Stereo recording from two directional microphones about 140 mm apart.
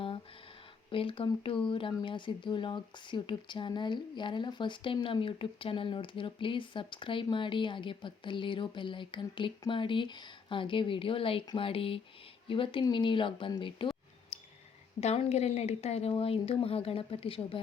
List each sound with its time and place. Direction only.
0.9 s speech: 40° left (ahead or behind)
14.3 s clicking: 55° left (ahead or behind)
15.0 s speech: 55° left (ahead or behind)